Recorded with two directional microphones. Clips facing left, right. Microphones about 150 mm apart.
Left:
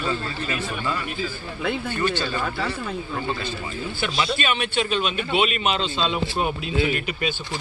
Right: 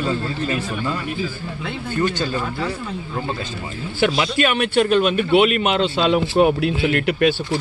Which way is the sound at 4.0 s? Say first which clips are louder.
Right 8 dB; 70° right (ahead or behind).